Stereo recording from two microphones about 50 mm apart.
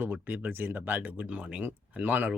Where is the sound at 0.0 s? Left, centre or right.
Right.